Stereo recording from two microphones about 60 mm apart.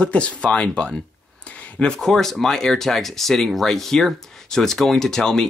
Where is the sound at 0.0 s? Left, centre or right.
Centre.